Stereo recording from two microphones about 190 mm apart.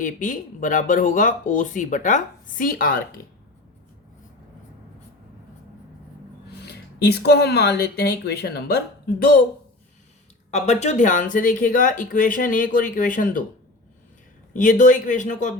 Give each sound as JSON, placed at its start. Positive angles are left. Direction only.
{"t": 0.0, "sound": "speech", "side_deg": 45}
{"t": 6.7, "sound": "speech", "side_deg": 60}
{"t": 10.5, "sound": "speech", "side_deg": 35}
{"t": 14.5, "sound": "speech", "side_deg": 40}